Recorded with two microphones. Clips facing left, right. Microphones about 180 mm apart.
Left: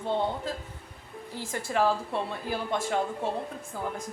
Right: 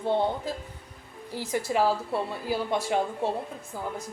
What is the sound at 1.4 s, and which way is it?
Speech, 50° left (ahead or behind).